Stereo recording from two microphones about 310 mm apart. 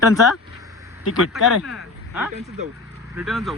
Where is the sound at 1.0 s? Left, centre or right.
Left.